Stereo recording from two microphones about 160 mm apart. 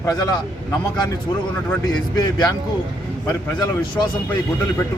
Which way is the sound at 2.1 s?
25° left (ahead or behind).